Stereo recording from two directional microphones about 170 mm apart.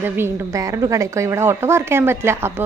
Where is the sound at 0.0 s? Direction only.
15° right (ahead or behind).